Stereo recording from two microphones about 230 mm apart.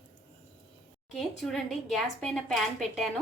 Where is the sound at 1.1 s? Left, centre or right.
Centre.